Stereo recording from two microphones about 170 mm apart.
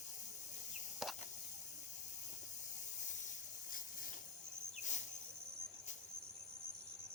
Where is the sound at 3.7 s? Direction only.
50° left (ahead or behind).